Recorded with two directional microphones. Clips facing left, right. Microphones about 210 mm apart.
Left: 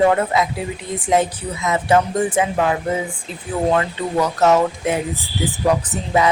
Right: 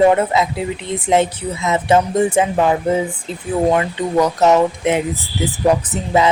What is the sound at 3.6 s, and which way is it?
Speech, 20° right (ahead or behind).